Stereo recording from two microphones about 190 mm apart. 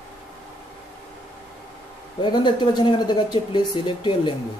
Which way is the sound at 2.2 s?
25° left (ahead or behind).